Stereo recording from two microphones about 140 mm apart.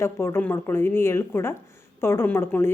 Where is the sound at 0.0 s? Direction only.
20° left (ahead or behind).